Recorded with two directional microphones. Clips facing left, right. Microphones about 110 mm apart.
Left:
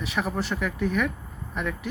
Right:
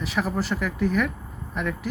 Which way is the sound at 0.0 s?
Centre (ahead or behind).